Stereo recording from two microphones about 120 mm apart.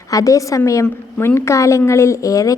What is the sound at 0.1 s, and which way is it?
A woman's voice, 30° left (ahead or behind).